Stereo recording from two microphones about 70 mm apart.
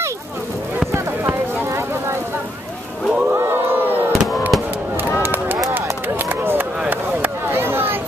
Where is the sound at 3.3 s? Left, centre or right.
Right.